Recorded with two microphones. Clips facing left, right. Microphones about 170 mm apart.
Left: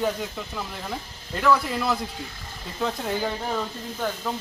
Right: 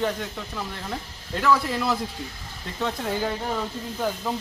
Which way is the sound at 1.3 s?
Centre (ahead or behind).